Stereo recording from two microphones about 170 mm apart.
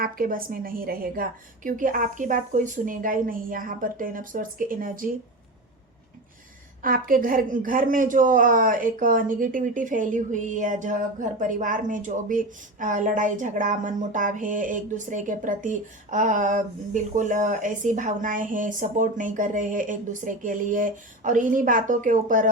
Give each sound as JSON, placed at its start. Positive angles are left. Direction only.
{"t": 0.0, "sound": "a woman's voice", "side_deg": -55}
{"t": 6.8, "sound": "speech", "side_deg": -55}